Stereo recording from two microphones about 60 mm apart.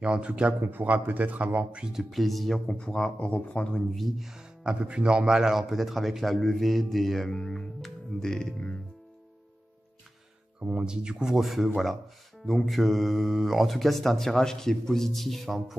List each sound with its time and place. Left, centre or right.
0.0 s speech: centre
0.6 s speech: right; by 2.0 s centre
2.0 s speech: centre
2.7 s speech: centre
3.9 s speech: centre
10.6 s speech: centre